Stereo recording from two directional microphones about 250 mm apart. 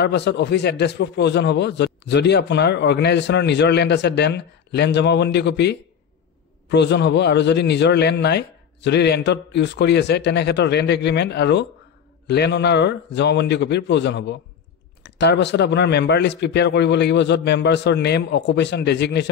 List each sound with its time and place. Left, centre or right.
0.0 s a man's voice: left